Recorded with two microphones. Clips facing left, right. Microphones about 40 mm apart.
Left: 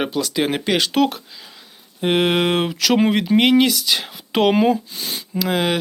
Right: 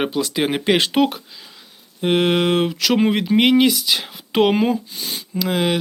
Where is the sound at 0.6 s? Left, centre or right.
Right.